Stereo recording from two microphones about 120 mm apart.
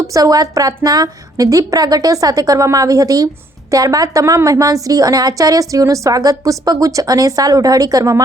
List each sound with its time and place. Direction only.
0.1 s a woman's voice: 30° right (ahead or behind)